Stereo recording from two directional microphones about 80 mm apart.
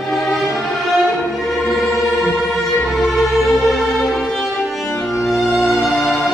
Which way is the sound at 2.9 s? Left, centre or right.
Centre.